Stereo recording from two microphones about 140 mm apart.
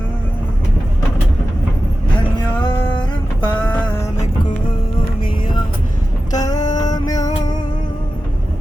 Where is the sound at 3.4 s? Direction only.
10° left (ahead or behind).